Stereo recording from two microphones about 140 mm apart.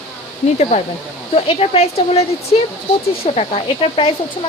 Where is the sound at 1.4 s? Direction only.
45° left (ahead or behind).